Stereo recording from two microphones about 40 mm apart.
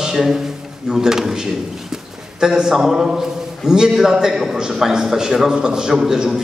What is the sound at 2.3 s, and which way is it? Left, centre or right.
A man's voice, centre.